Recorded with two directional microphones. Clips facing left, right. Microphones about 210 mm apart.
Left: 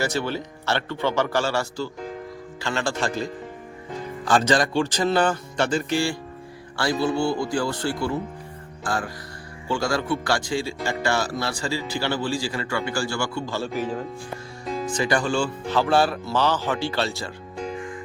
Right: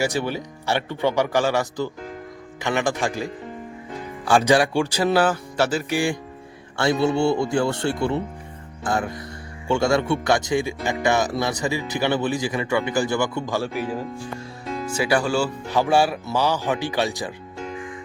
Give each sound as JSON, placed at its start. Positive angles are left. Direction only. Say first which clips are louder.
{"t": 0.0, "sound": "speech", "louder": "right 2 dB", "side_deg": -15}
{"t": 4.3, "sound": "speech", "louder": "right 3 dB", "side_deg": -10}